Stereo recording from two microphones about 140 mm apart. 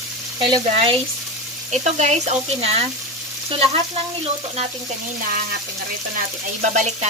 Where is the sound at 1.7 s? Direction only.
55° right (ahead or behind).